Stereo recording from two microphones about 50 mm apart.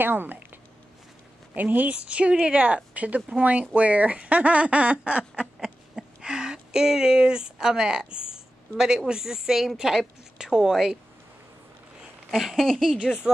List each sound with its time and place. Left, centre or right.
0.0 s speech: right
1.5 s speech: right
1.9 s speech: right
12.3 s speech: centre